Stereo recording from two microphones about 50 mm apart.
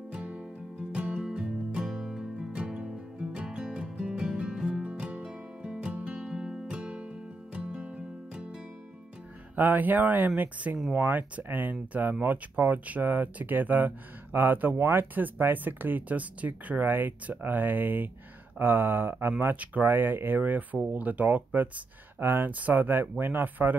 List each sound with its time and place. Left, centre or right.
0.1 s music: right
9.6 s speech: right
14.3 s a sound: right
15.1 s speech: right
18.6 s a sound: right
19.5 s speech: right
19.8 s speech: right
22.5 s speech: right